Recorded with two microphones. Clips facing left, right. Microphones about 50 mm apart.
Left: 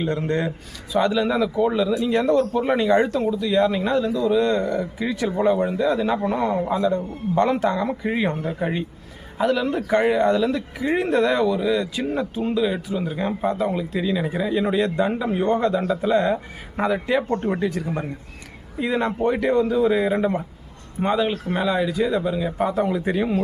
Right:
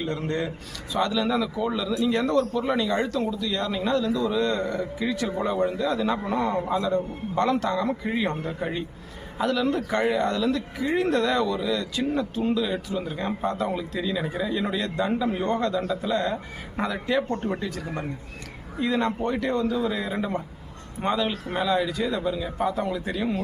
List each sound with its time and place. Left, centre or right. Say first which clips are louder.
0.9 s a man's voice: left 4 dB; centre
2.3 s a man's voice: left 4 dB; left; by 14.7 s centre
14.7 s a man's voice: left 5 dB; left
18.8 s a man's voice: left 3 dB; centre